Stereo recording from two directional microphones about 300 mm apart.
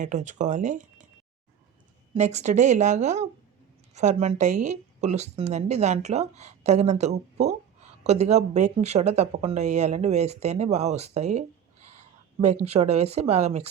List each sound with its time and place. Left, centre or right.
0.0 s speech: right
2.1 s speech: right